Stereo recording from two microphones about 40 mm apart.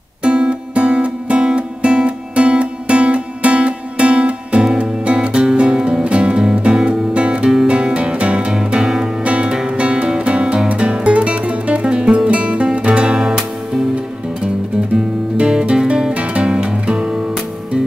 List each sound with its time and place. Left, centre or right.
0.2 s music: right
8.5 s music: centre
9.2 s music: right
15.3 s music: centre
16.1 s music: right